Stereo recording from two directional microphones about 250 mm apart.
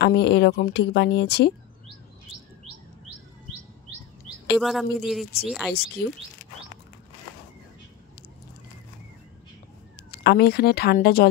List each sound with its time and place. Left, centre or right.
0.0 s speech: left
4.6 s speech: centre
5.7 s speech: left
10.1 s speech: left